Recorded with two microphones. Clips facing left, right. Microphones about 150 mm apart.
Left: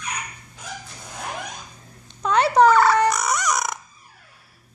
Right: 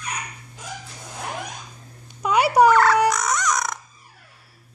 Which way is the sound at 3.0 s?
5° left (ahead or behind).